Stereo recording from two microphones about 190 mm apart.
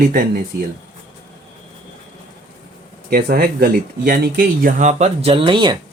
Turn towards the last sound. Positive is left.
turn(degrees=-25)  # may be behind; listen again after turning